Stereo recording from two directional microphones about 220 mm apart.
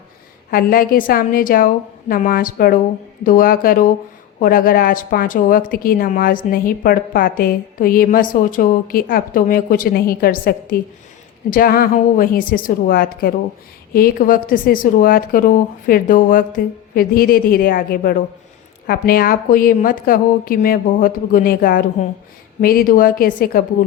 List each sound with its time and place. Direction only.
0.5 s a woman's voice: 40° left (ahead or behind)